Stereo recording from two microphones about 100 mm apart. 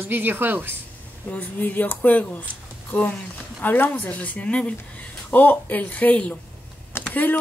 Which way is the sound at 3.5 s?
20° left (ahead or behind).